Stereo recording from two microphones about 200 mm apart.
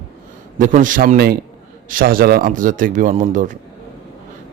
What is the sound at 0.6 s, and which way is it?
A man's voice, 40° right (ahead or behind).